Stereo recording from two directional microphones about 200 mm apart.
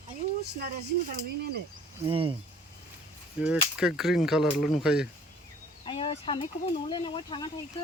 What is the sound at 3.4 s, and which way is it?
Speech, 5° right (ahead or behind).